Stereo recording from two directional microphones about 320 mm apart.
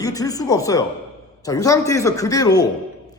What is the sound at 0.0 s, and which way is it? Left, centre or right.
A man's voice, centre.